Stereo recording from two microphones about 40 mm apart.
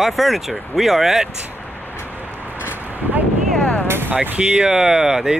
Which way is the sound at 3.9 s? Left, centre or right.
Right.